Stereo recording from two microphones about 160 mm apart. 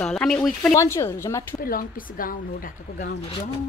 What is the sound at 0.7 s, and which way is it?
Speech, 15° left (ahead or behind).